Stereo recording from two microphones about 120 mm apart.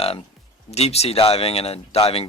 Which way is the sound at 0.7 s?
60° left (ahead or behind).